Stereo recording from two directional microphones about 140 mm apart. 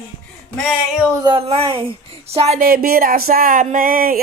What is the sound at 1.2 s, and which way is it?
Speech, 40° right (ahead or behind).